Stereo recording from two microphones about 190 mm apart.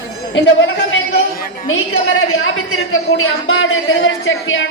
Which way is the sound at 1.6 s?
90° left.